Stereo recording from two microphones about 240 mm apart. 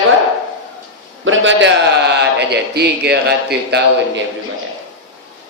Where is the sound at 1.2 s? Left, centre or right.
Right.